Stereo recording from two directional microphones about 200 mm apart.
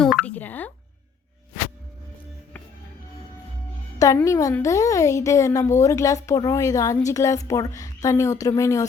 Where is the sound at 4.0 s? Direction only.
15° left (ahead or behind).